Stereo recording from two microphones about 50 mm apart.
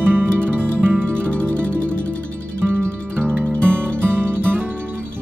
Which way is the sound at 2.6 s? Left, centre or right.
Right.